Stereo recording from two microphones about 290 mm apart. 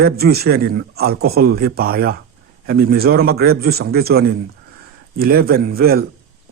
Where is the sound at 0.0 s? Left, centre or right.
Right.